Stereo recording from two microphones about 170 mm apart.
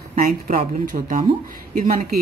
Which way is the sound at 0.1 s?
50° right (ahead or behind).